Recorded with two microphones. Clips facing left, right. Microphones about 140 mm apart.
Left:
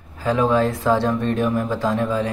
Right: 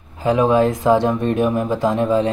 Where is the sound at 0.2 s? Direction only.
20° right (ahead or behind).